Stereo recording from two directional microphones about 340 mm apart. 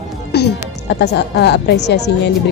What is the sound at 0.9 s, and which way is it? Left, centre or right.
A woman's voice, left.